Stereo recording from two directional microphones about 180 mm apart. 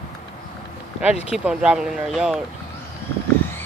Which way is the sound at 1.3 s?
5° right (ahead or behind).